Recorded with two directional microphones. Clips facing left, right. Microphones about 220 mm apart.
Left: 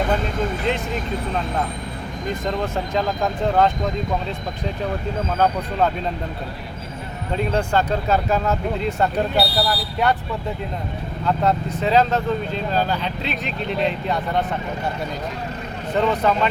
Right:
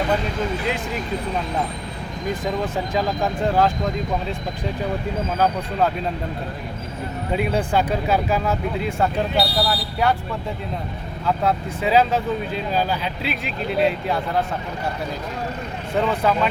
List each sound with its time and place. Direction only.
2.4 s speech: 5° right (ahead or behind)
7.3 s speech: 10° right (ahead or behind)
9.0 s speech: centre (ahead or behind)
11.3 s speech: 5° right (ahead or behind)
16.0 s speech: centre (ahead or behind)